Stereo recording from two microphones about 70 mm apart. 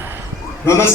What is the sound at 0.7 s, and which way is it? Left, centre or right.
Speech, left.